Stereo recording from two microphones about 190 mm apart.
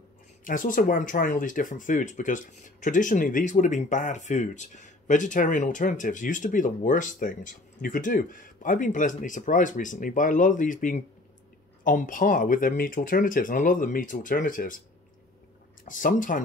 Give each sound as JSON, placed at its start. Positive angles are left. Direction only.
{"t": 0.4, "sound": "speech", "side_deg": 45}
{"t": 15.8, "sound": "speech", "side_deg": 45}